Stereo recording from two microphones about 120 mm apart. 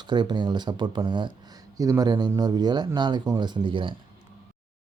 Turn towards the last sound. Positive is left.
turn(degrees=-40)  # may be behind; listen again after turning